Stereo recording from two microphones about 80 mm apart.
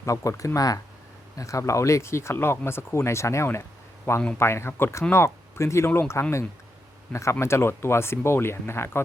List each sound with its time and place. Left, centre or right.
0.3 s speech: left